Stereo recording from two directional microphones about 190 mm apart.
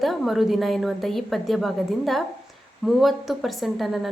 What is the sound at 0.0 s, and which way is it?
A woman's voice, centre (ahead or behind).